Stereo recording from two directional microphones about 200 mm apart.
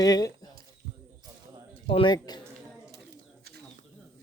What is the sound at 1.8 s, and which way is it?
Speech, 25° left (ahead or behind).